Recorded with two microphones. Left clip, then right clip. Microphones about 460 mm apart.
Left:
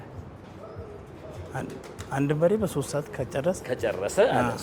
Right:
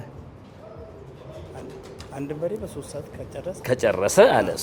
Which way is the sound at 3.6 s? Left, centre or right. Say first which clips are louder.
Right 7 dB; right.